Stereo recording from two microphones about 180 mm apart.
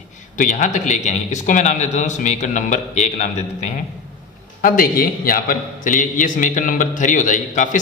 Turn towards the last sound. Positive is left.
turn(degrees=45)  # may be behind; listen again after turning